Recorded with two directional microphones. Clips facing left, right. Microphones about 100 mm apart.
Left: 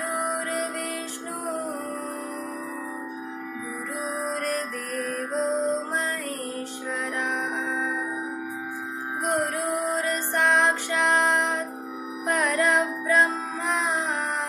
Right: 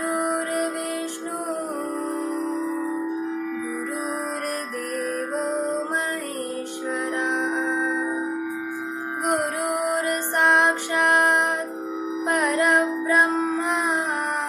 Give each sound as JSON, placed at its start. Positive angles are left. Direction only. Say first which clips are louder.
{"t": 0.0, "sound": "music", "louder": "right 4 dB", "side_deg": -20}
{"t": 4.5, "sound": "music", "louder": "right 1 dB", "side_deg": -15}
{"t": 9.6, "sound": "music", "louder": "right 2 dB", "side_deg": -70}
{"t": 10.4, "sound": "music", "louder": "right 2 dB", "side_deg": -15}